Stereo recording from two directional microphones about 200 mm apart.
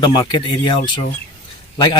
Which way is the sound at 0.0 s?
20° left (ahead or behind).